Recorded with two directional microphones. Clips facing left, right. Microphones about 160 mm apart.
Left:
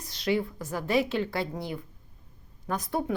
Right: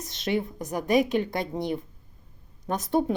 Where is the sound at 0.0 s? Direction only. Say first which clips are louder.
Even; 20° right (ahead or behind).